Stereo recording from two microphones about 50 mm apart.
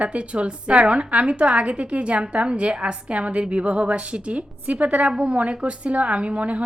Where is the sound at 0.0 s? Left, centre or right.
Right.